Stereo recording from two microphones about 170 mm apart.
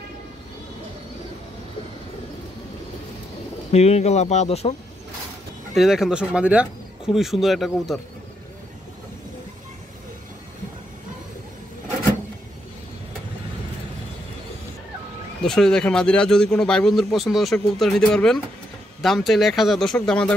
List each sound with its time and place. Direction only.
3.7 s speech: 40° left (ahead or behind)
5.8 s speech: centre (ahead or behind)
15.4 s speech: 5° left (ahead or behind)